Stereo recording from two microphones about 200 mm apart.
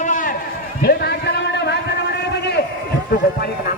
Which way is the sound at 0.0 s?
40° left (ahead or behind).